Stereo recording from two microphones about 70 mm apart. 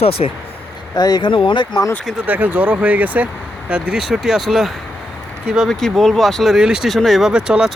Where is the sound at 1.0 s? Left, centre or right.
Left.